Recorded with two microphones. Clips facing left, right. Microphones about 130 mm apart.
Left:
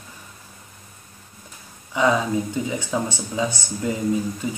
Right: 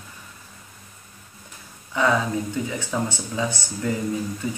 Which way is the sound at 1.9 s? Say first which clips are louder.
Left 2 dB; 15° left (ahead or behind).